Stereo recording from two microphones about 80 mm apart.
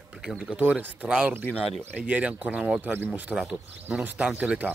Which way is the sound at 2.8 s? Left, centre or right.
Right.